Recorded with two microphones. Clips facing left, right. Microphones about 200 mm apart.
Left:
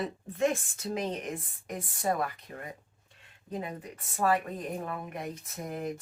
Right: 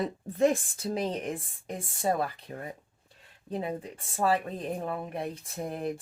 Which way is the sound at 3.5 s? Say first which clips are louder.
Right 4 dB; 30° right (ahead or behind).